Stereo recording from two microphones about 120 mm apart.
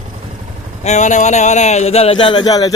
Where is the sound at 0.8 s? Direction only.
80° left; by 2.7 s 30° left (ahead or behind).